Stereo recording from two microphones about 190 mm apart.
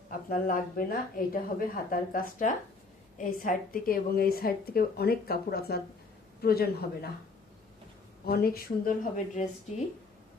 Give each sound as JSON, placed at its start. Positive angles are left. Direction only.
{"t": 0.1, "sound": "a woman's voice", "side_deg": 45}
{"t": 8.3, "sound": "a woman's voice", "side_deg": 55}